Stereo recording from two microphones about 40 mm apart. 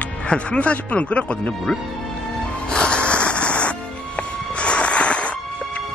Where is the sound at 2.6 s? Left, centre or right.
Left.